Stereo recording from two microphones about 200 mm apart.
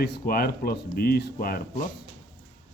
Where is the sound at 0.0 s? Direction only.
50° left (ahead or behind).